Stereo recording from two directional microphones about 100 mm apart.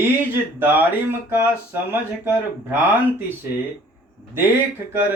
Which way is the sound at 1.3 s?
20° right (ahead or behind).